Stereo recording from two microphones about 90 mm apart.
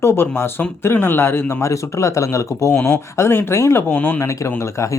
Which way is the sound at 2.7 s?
20° left (ahead or behind).